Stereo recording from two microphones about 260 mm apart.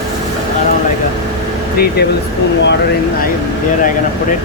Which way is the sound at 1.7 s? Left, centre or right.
Left.